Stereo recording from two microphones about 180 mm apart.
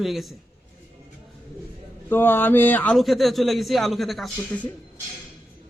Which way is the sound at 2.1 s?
10° left (ahead or behind).